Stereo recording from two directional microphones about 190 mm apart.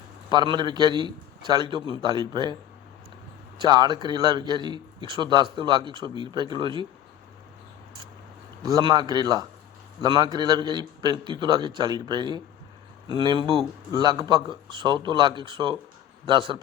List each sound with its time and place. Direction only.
0.3 s a man's voice: 25° right (ahead or behind)
3.6 s a man's voice: 20° right (ahead or behind)
8.6 s a man's voice: 20° right (ahead or behind)